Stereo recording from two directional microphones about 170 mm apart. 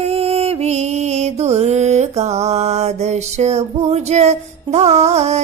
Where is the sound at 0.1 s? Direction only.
35° right (ahead or behind).